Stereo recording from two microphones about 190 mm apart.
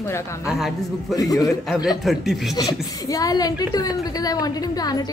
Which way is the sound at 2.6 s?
20° left (ahead or behind).